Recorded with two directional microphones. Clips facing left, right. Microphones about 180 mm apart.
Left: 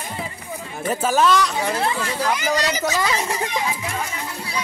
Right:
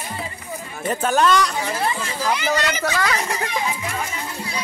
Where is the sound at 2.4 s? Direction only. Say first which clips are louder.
Even; 40° left (ahead or behind).